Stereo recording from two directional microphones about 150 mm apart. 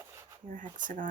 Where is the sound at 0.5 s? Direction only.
60° right (ahead or behind).